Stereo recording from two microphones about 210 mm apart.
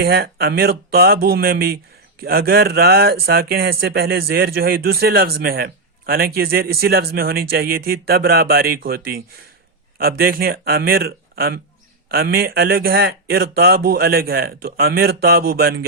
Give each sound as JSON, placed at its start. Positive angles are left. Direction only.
{"t": 0.0, "sound": "speech", "side_deg": -45}